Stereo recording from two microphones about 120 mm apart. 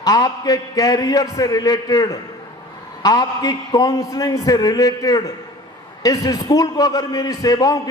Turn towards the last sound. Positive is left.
turn(degrees=30)  # may be behind; listen again after turning